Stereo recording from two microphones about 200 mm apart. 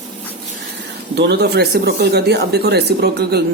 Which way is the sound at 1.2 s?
55° right (ahead or behind).